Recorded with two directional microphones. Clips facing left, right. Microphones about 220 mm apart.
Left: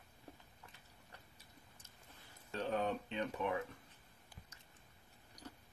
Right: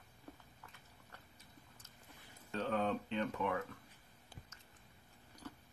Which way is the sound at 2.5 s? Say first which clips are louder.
Right 1 dB; 15° left (ahead or behind).